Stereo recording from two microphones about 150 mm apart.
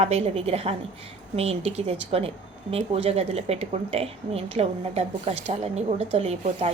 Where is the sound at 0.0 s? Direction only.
45° right (ahead or behind).